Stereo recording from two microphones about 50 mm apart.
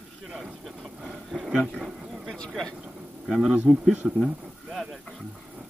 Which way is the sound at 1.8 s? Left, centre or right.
Centre.